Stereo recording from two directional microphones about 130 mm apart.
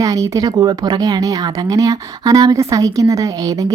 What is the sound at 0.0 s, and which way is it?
Speech, 25° right (ahead or behind).